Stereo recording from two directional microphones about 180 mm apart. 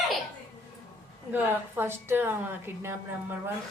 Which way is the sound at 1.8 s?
10° right (ahead or behind).